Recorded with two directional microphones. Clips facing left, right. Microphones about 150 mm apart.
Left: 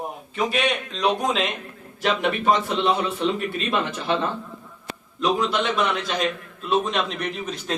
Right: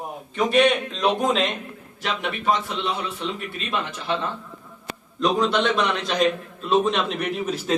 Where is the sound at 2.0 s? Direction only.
55° left (ahead or behind).